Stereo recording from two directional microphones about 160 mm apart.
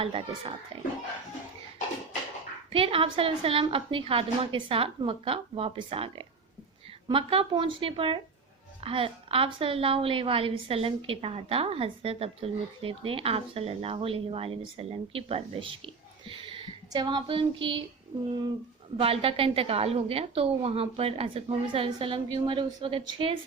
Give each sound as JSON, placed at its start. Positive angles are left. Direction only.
{"t": 0.0, "sound": "a woman's voice", "side_deg": -35}
{"t": 2.7, "sound": "a woman's voice", "side_deg": -35}